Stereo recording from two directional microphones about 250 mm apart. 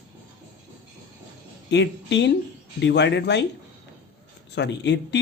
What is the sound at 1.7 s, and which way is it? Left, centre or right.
Speech, left.